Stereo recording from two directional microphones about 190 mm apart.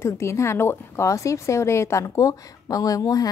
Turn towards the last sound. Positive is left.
turn(degrees=20)  # may be behind; listen again after turning